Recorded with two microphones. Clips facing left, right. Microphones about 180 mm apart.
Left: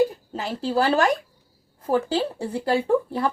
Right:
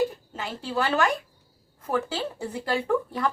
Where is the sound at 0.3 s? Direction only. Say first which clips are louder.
Left 6 dB; 35° left (ahead or behind).